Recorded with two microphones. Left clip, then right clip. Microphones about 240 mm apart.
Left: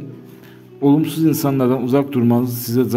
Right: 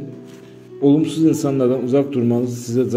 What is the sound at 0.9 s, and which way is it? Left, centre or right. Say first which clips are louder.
A man's voice: even; left.